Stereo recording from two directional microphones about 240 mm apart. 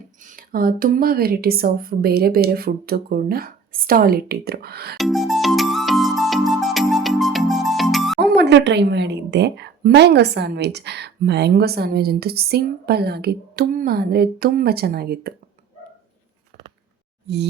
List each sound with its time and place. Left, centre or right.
0.3 s a woman's voice: right
4.9 s music: centre
8.2 s a woman's voice: right